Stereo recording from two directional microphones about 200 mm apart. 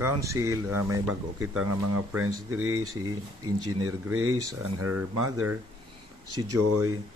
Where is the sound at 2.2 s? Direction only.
90° right.